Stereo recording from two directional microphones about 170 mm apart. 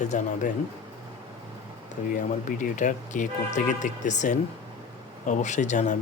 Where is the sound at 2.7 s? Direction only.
45° left (ahead or behind).